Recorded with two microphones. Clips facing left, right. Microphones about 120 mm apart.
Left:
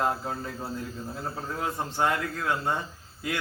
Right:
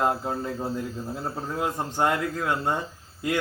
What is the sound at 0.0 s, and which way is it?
A man's voice, 20° right (ahead or behind).